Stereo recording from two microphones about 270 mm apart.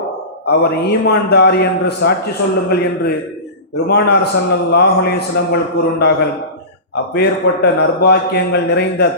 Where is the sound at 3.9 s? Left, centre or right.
Left.